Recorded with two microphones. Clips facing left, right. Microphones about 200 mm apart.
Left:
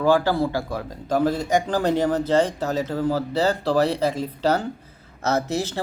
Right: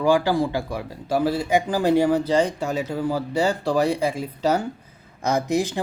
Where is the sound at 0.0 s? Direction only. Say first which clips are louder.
Even; 15° right (ahead or behind).